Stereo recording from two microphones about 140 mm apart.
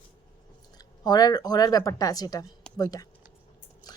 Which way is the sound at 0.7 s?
30° left (ahead or behind).